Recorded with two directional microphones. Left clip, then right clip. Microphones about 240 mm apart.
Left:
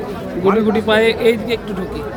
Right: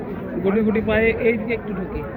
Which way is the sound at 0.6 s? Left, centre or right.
Left.